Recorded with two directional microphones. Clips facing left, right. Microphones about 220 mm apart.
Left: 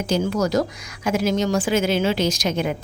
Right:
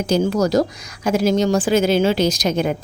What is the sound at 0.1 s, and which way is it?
A woman's voice, 35° right (ahead or behind).